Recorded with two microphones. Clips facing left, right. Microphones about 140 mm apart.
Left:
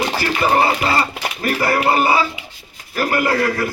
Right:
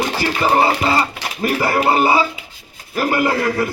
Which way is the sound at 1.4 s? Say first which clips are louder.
Right 1 dB; 25° right (ahead or behind).